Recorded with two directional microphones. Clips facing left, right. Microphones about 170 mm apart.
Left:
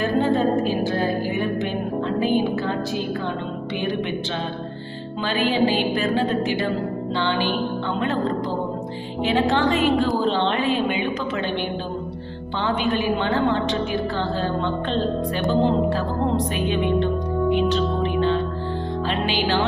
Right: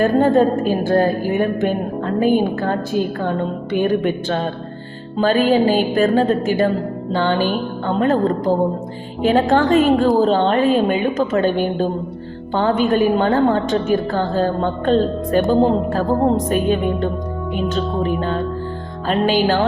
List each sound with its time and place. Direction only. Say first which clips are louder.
0.0 s a woman's voice: right 6 dB; 50° right (ahead or behind)